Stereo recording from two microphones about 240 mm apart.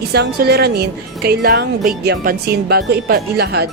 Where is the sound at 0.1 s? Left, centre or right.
Right.